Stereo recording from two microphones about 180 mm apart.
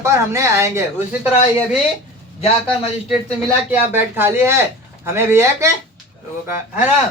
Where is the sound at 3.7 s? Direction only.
10° right (ahead or behind).